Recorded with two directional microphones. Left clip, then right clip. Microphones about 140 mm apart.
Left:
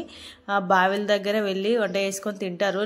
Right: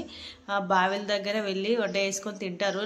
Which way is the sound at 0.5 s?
40° left (ahead or behind).